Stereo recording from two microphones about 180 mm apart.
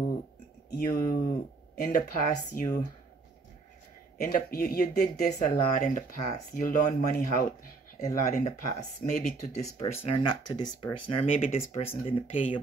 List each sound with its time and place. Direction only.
0.7 s speech: 55° left (ahead or behind)
4.2 s speech: 55° left (ahead or behind); by 12.5 s 30° left (ahead or behind)